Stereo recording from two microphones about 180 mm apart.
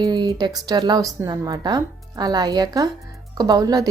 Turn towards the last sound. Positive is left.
turn(degrees=-20)  # may be behind; listen again after turning